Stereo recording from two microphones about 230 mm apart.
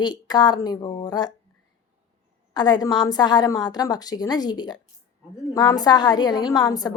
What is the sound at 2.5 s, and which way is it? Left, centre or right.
A woman's voice, centre.